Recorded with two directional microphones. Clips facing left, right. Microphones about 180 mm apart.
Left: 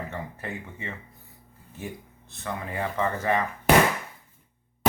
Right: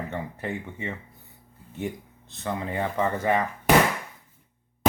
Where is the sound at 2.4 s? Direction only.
25° right (ahead or behind).